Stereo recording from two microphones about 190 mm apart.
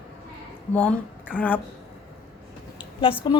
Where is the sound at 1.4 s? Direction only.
10° left (ahead or behind).